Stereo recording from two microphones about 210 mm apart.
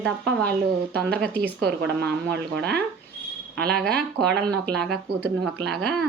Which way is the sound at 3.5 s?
5° left (ahead or behind).